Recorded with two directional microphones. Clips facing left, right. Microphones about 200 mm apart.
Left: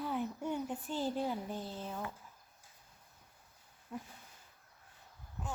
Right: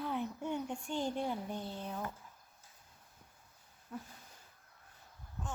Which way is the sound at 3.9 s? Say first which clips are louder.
Left 1 dB; 15° left (ahead or behind).